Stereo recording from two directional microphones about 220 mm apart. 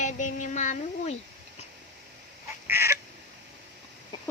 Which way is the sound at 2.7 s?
10° right (ahead or behind).